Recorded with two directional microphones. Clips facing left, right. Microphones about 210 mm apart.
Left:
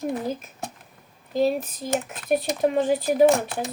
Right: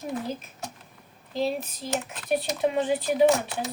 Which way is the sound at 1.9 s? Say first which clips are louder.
Left 4 dB; 45° left (ahead or behind).